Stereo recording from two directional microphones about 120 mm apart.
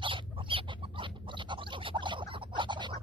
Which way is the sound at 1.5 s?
45° right (ahead or behind).